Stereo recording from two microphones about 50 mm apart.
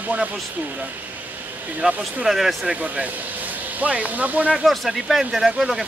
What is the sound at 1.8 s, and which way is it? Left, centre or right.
Speech, right.